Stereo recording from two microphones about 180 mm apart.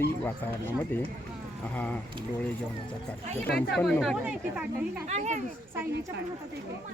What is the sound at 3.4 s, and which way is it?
Speech, 5° left (ahead or behind).